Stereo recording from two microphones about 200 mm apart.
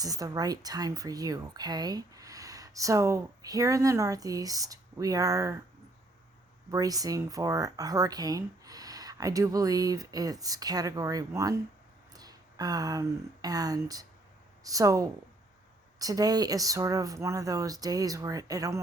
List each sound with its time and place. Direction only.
0.0 s speech: 20° right (ahead or behind)
6.7 s speech: 15° right (ahead or behind)